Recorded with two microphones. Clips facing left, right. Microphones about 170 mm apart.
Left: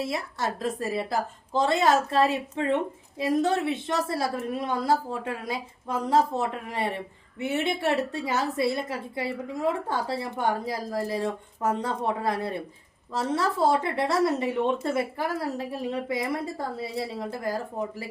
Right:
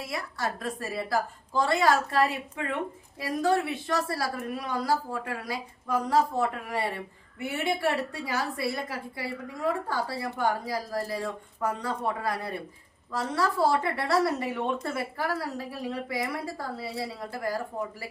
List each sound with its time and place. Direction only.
0.0 s a woman's voice: 25° left (ahead or behind)